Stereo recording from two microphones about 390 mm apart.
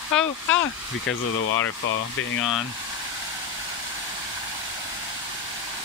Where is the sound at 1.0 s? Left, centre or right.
Left.